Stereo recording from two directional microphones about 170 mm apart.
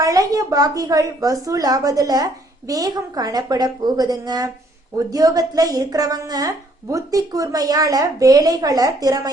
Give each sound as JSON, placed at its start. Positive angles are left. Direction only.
{"t": 0.0, "sound": "a woman's voice", "side_deg": -20}